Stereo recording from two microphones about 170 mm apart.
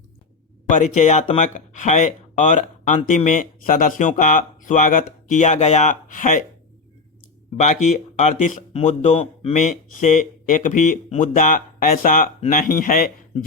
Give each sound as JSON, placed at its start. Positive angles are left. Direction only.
{"t": 0.7, "sound": "speech", "side_deg": 45}
{"t": 7.5, "sound": "speech", "side_deg": 40}